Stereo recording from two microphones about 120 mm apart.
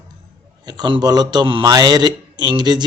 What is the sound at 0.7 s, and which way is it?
Speech, 40° right (ahead or behind).